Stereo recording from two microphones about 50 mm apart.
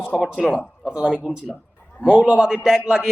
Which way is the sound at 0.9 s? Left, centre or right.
Centre.